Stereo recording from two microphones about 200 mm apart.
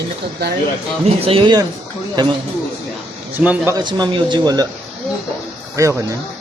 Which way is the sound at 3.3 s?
10° right (ahead or behind).